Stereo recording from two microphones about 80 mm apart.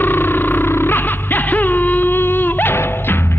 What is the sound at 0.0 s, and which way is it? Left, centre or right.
Music, left.